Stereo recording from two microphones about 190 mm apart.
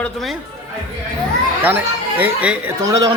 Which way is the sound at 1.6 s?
10° right (ahead or behind).